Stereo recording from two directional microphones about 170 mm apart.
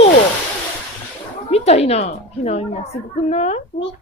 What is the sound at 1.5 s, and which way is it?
A woman's voice, 40° left (ahead or behind).